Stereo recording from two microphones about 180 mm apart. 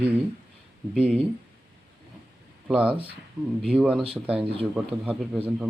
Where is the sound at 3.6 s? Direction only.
5° right (ahead or behind).